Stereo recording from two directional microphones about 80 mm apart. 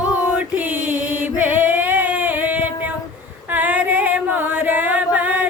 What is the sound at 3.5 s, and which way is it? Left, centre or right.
Singing, right.